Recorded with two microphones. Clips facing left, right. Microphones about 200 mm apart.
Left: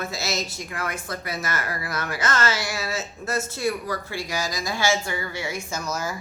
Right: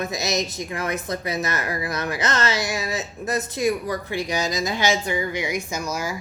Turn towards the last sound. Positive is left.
turn(degrees=-10)  # may be behind; listen again after turning